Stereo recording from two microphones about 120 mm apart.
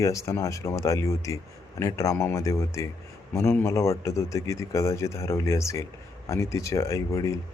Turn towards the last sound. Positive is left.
turn(degrees=25)  # may be behind; listen again after turning